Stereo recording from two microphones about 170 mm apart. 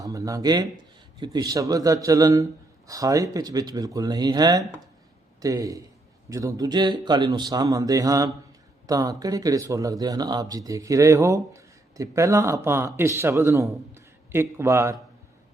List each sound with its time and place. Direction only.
0.0 s a man's voice: 20° right (ahead or behind)